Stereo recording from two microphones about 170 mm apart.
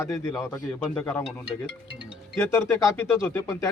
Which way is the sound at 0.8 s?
10° left (ahead or behind).